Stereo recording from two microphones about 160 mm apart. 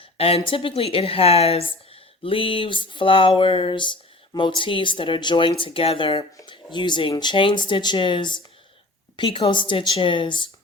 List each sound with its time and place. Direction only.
0.0 s speech: 35° left (ahead or behind)